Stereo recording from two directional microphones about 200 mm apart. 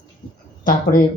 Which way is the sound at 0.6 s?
40° left (ahead or behind).